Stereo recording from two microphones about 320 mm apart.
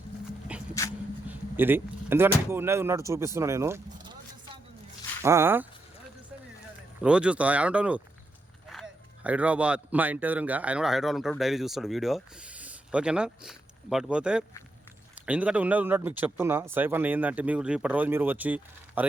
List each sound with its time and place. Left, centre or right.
0.7 s dog: centre
1.3 s speech: centre
5.2 s speech: centre
7.0 s speech: centre